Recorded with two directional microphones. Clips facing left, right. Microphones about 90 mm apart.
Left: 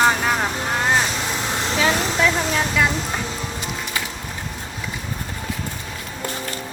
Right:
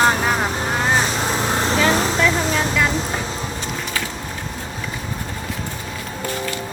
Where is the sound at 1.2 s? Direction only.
40° right (ahead or behind).